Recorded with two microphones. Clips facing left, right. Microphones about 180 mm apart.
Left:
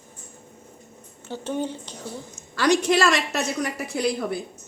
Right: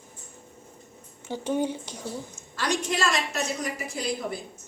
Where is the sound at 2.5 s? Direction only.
80° left; by 4.3 s 65° left (ahead or behind).